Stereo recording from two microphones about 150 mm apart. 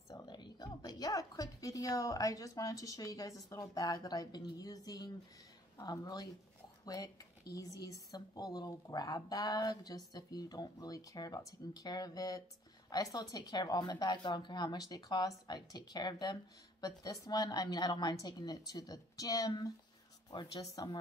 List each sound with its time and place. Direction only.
0.1 s a woman's voice: 25° left (ahead or behind)